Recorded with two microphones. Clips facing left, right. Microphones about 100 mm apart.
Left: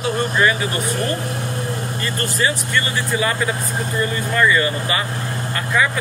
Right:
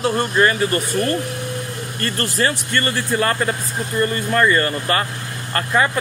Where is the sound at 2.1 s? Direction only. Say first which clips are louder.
Right 1 dB; 50° right (ahead or behind).